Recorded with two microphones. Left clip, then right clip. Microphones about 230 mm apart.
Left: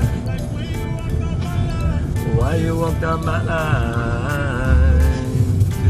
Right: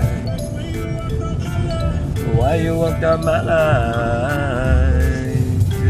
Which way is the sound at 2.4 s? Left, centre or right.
Centre.